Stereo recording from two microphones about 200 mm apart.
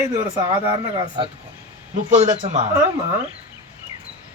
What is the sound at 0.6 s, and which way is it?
Speech, 25° right (ahead or behind).